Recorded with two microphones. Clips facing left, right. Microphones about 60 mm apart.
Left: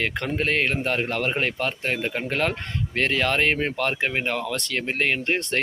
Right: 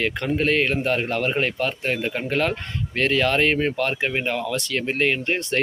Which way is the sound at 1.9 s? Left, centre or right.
Left.